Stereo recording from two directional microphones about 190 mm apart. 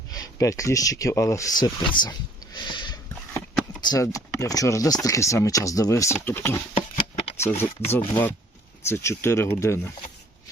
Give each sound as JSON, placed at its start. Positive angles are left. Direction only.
{"t": 0.1, "sound": "speech", "side_deg": 15}
{"t": 6.7, "sound": "a sound", "side_deg": 35}
{"t": 7.6, "sound": "speech", "side_deg": 10}